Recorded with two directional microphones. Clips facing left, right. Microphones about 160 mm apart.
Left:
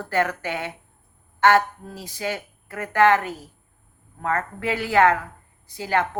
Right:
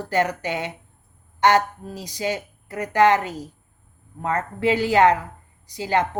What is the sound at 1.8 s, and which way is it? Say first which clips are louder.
A child's voice: right 3 dB; 20° right (ahead or behind).